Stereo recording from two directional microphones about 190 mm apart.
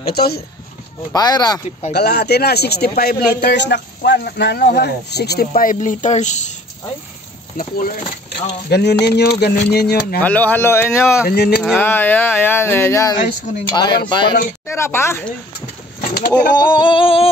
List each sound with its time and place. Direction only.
0.0 s speech: 55° left (ahead or behind)
1.1 s speech: 20° left (ahead or behind)
2.0 s speech: 60° left (ahead or behind)
5.5 s speech: 45° left (ahead or behind)
7.5 s speech: 50° left (ahead or behind)
8.6 s speech: 60° left (ahead or behind)
10.2 s speech: 10° left (ahead or behind)
11.2 s speech: 55° left (ahead or behind)
11.6 s speech: 10° left (ahead or behind)
16.0 s a sound: 45° left (ahead or behind)
16.7 s speech: 25° left (ahead or behind)